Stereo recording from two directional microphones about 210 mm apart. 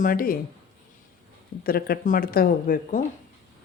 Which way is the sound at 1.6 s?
45° left (ahead or behind).